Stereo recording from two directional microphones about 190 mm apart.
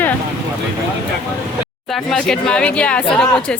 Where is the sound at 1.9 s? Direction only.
Centre (ahead or behind).